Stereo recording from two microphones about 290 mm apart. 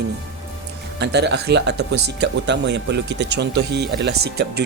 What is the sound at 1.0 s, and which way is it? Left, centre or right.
Speech, right.